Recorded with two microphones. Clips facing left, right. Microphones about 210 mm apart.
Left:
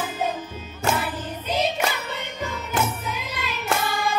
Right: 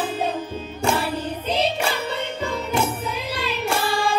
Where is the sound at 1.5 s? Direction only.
30° right (ahead or behind).